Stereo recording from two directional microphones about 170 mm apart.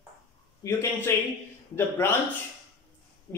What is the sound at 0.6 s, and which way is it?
Speech, 15° left (ahead or behind).